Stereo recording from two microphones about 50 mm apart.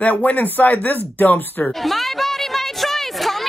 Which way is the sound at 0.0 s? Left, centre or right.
Left.